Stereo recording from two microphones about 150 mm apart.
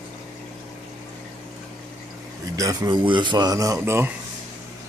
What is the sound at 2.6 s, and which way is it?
Speech, 25° right (ahead or behind).